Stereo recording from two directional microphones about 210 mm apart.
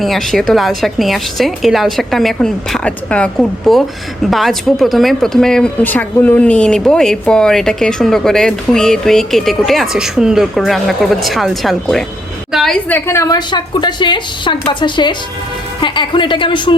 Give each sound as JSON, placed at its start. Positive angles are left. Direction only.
{"t": 0.0, "sound": "a woman's voice", "side_deg": 0}